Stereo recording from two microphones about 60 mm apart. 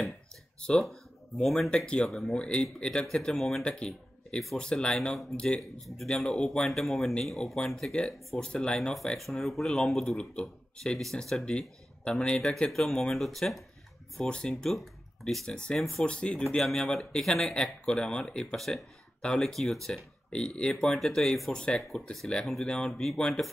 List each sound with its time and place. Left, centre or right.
0.6 s speech: centre
2.3 s speech: centre
3.6 s speech: centre
5.6 s speech: centre
12.2 s speech: centre
12.5 s speech: centre
14.1 s speech: centre
15.4 s speech: centre
15.8 s speech: centre
16.1 s speech: centre
20.2 s speech: centre